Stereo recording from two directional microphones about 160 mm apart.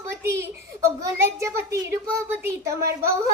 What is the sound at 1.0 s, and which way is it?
A child's voice, 20° right (ahead or behind).